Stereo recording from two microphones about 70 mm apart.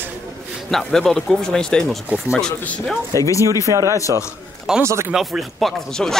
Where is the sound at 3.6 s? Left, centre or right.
Right.